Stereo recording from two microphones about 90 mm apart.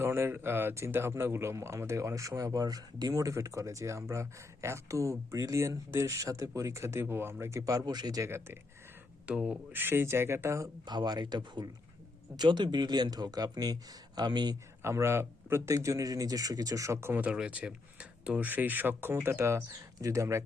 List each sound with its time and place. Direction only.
0.0 s speech: 25° right (ahead or behind); by 8.3 s 45° right (ahead or behind)
9.2 s speech: 10° right (ahead or behind)
9.7 s speech: 25° right (ahead or behind)
10.8 s speech: 50° right (ahead or behind)
14.8 s speech: 30° right (ahead or behind)
17.2 s speech: 15° right (ahead or behind); by 20.4 s 35° right (ahead or behind)